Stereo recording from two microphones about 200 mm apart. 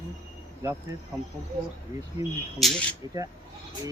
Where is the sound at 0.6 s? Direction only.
15° right (ahead or behind).